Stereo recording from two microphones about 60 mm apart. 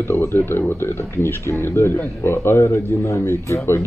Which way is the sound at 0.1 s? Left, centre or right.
Left.